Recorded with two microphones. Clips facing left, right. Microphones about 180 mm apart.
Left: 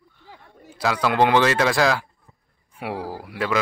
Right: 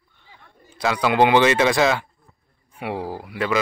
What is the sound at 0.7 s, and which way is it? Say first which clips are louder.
A man's voice: right 1 dB; centre (ahead or behind).